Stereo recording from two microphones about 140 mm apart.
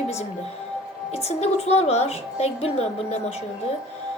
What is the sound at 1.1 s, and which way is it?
A woman's voice, 50° left (ahead or behind).